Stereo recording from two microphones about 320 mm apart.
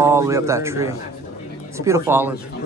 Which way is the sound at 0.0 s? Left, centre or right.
Centre.